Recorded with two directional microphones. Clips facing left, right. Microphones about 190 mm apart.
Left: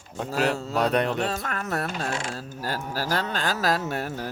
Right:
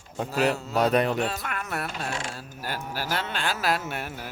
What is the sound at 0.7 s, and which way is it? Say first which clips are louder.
Speech: right 1 dB; centre (ahead or behind).